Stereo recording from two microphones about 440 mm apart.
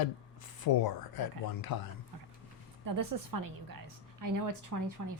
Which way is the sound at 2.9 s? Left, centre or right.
Right.